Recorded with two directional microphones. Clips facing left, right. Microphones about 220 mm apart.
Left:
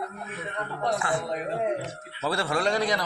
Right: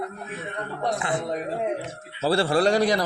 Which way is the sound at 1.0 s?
20° right (ahead or behind).